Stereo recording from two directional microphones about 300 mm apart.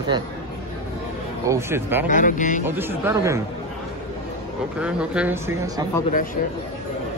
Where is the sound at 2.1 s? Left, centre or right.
Left.